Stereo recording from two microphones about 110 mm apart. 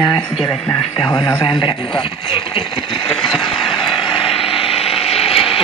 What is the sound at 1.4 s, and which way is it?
Speech, 50° left (ahead or behind).